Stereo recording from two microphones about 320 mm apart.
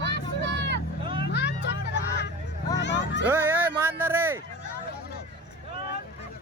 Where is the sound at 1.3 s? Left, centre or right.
Left.